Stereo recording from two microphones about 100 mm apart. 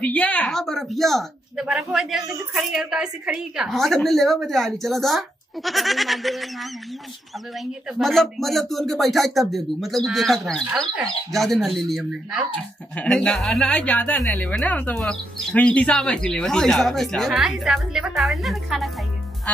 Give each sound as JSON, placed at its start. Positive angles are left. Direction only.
{"t": 0.0, "sound": "a woman's voice", "side_deg": 15}
{"t": 1.7, "sound": "a woman's voice", "side_deg": -10}
{"t": 12.9, "sound": "a woman's voice", "side_deg": 10}